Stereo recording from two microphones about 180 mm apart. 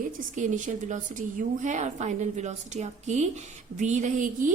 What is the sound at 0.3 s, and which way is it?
A woman's voice, 45° right (ahead or behind).